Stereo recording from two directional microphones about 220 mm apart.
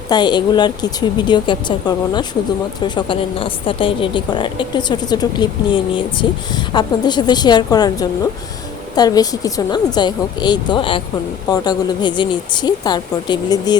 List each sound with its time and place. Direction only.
0.1 s a woman's voice: 20° left (ahead or behind)